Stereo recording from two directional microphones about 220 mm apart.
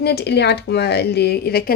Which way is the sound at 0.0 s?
45° left (ahead or behind).